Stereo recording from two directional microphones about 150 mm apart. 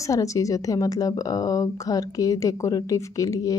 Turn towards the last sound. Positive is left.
turn(degrees=20)  # may be behind; listen again after turning